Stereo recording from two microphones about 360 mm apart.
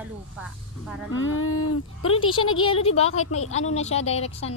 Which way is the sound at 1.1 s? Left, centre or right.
Left.